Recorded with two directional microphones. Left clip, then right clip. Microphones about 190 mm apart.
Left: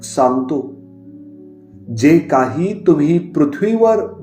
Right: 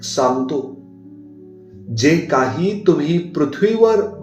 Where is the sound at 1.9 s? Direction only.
50° left (ahead or behind).